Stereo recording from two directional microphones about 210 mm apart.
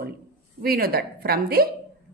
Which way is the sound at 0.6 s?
45° right (ahead or behind).